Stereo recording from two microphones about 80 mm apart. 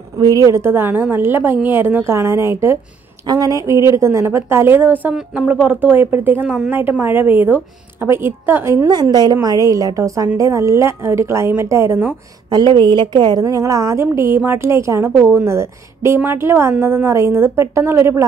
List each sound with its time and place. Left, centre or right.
0.2 s a woman's voice: right
0.5 s a woman's voice: right
2.1 s a woman's voice: right
3.3 s a woman's voice: right
9.1 s a woman's voice: right
12.4 s a woman's voice: right
13.4 s a woman's voice: right